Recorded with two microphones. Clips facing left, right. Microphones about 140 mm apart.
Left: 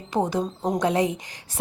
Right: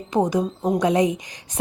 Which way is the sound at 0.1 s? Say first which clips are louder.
Right 3 dB; 15° right (ahead or behind).